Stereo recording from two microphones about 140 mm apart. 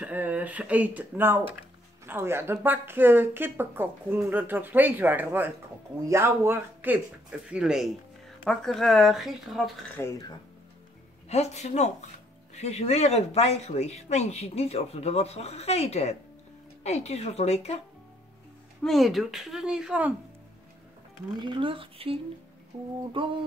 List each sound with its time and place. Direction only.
0.0 s speech: 10° right (ahead or behind)
10.0 s speech: 20° left (ahead or behind)
11.2 s speech: 50° left (ahead or behind)
18.9 s speech: centre (ahead or behind)
21.4 s speech: 35° right (ahead or behind)